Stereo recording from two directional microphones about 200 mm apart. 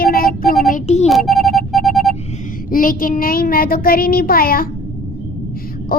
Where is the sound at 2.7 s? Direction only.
45° left (ahead or behind).